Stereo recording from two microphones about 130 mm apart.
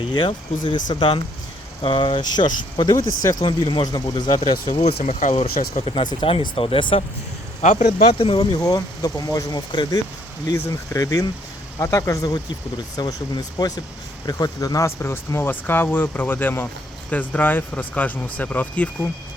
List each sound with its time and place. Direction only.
0.0 s speech: 40° left (ahead or behind)
4.8 s speech: 60° left (ahead or behind)
5.8 s speech: 40° left (ahead or behind)
7.6 s speech: 70° left (ahead or behind)
8.2 s speech: 40° left (ahead or behind); by 18.9 s 10° left (ahead or behind)